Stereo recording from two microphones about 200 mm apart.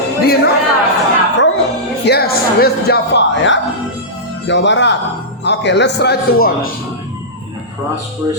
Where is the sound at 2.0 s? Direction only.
55° left (ahead or behind).